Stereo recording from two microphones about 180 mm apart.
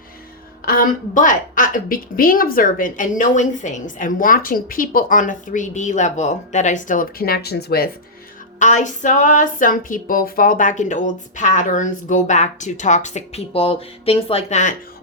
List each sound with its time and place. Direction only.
0.6 s a woman's voice: 50° left (ahead or behind)
8.5 s a woman's voice: 45° left (ahead or behind)